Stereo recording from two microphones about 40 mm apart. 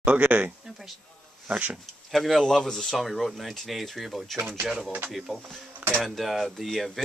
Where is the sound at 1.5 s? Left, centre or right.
Right.